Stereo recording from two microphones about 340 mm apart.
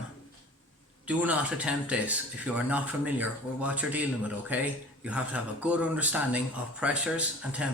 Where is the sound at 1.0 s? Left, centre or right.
Centre.